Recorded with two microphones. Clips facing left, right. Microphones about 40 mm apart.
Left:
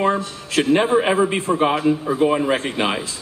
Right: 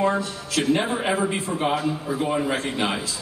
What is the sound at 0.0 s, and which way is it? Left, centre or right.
A man's voice, left.